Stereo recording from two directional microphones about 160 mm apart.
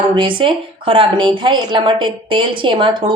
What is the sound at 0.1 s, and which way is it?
A woman's voice, 30° right (ahead or behind).